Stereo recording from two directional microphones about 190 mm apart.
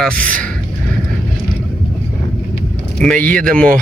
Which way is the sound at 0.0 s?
5° left (ahead or behind).